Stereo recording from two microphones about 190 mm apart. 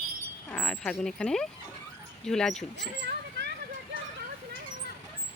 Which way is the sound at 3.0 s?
65° right (ahead or behind).